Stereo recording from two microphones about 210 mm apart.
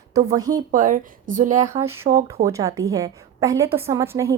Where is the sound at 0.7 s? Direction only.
40° right (ahead or behind).